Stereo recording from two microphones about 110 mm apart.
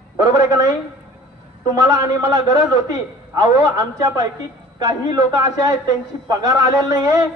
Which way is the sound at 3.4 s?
35° right (ahead or behind).